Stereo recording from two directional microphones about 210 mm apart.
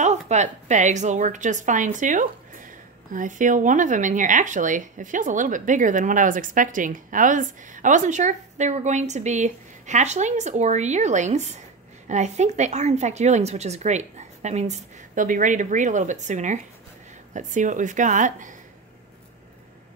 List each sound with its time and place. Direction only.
0.0 s a woman's voice: 35° right (ahead or behind)